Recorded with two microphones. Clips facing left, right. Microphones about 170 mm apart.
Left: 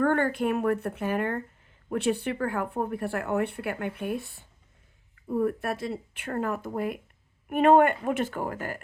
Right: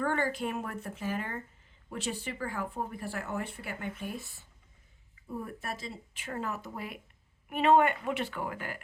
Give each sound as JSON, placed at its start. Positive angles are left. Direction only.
{"t": 0.0, "sound": "a woman's voice", "side_deg": 55}